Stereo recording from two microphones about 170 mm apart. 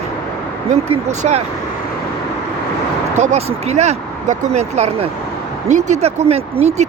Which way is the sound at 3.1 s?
40° right (ahead or behind).